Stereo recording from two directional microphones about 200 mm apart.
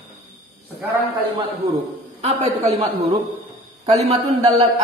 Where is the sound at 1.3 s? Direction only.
30° right (ahead or behind).